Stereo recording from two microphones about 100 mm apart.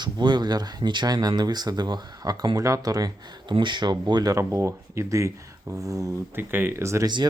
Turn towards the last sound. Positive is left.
turn(degrees=-30)  # may be behind; listen again after turning